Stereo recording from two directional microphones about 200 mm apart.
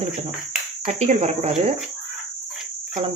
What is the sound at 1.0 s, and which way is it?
Speech, 35° right (ahead or behind).